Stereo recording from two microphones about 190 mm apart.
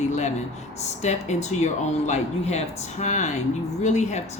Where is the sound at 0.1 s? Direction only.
35° left (ahead or behind).